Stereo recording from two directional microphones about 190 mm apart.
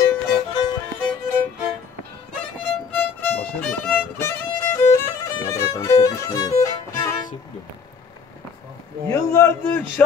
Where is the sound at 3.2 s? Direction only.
5° left (ahead or behind).